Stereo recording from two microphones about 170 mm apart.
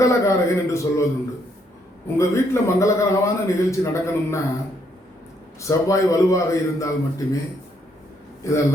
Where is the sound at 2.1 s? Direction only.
15° left (ahead or behind).